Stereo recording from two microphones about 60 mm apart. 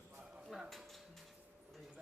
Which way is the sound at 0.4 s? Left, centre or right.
Centre.